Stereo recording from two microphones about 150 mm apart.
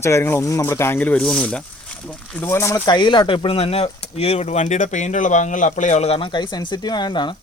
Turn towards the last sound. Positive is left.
turn(degrees=30)  # may be behind; listen again after turning